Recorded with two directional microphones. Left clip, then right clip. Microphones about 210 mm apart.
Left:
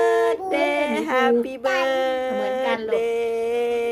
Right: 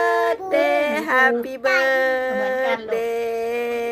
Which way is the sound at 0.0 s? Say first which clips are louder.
Even; centre (ahead or behind).